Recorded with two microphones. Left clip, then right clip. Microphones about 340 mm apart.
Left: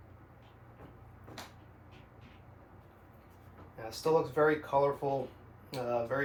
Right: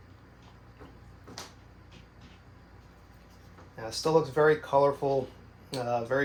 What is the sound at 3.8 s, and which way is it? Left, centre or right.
Speech, right.